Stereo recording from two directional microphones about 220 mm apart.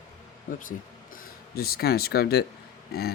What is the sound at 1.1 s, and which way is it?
Speech, 45° left (ahead or behind).